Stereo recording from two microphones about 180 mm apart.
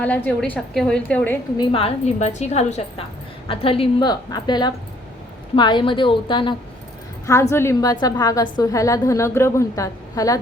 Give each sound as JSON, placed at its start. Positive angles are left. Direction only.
{"t": 0.0, "sound": "a woman's voice", "side_deg": 10}
{"t": 1.5, "sound": "a woman's voice", "side_deg": 30}
{"t": 7.5, "sound": "a woman's voice", "side_deg": 15}